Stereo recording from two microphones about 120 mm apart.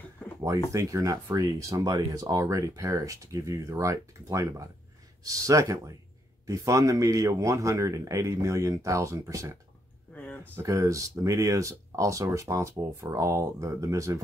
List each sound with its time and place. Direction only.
0.7 s speech: 25° right (ahead or behind)
10.1 s a sound: 15° left (ahead or behind)
10.5 s speech: 25° right (ahead or behind)